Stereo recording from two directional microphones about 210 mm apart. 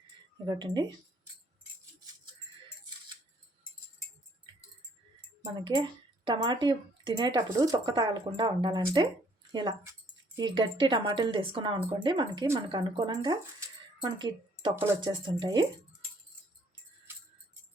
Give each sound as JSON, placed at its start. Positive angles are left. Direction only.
{"t": 0.4, "sound": "speech", "side_deg": -20}
{"t": 5.5, "sound": "speech", "side_deg": -20}